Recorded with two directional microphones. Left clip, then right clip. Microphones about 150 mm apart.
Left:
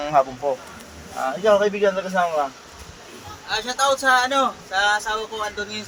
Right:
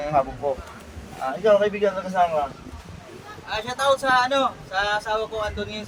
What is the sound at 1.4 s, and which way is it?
Speech, 25° left (ahead or behind).